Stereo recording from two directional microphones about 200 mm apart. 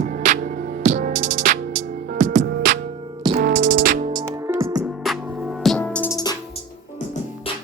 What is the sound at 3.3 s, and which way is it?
Music, 40° right (ahead or behind).